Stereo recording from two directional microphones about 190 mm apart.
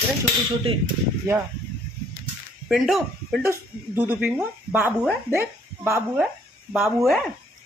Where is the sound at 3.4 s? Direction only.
15° right (ahead or behind).